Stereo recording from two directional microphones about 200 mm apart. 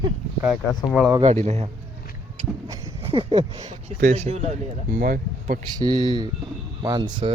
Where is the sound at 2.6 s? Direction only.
15° right (ahead or behind).